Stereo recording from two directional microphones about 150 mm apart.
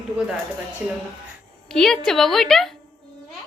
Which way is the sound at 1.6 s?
5° left (ahead or behind).